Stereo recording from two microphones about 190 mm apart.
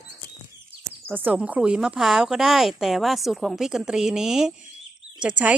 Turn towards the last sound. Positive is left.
turn(degrees=-5)  # may be behind; listen again after turning